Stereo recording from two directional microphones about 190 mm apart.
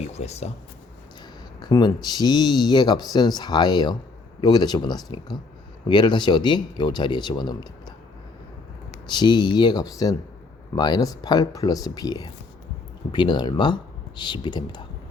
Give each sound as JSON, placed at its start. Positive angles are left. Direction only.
{"t": 0.0, "sound": "speech", "side_deg": 35}
{"t": 1.5, "sound": "speech", "side_deg": 20}
{"t": 9.0, "sound": "speech", "side_deg": 25}